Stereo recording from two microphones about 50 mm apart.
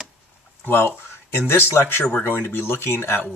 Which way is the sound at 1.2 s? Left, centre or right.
Left.